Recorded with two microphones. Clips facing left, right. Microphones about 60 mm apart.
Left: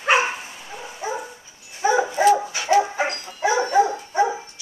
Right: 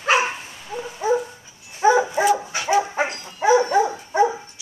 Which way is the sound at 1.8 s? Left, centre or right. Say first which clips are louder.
Right 1 dB; right.